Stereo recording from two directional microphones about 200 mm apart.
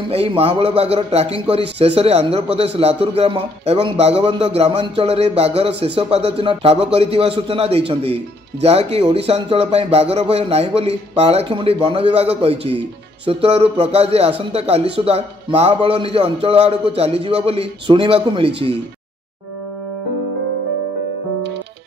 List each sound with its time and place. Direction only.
0.1 s a man's voice: 30° right (ahead or behind)